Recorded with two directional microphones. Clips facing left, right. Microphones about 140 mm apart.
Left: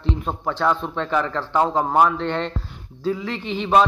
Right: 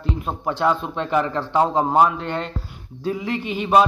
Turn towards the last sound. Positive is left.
turn(degrees=-10)  # may be behind; listen again after turning